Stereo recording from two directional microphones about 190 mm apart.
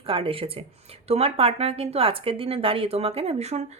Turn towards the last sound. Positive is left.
turn(degrees=-35)  # may be behind; listen again after turning